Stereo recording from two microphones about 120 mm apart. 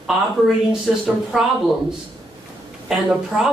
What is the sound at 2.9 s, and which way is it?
Speech, 5° right (ahead or behind).